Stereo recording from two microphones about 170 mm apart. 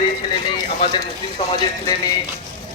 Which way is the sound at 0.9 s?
25° left (ahead or behind).